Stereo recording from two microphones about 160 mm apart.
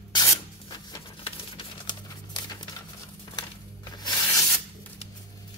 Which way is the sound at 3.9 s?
25° left (ahead or behind).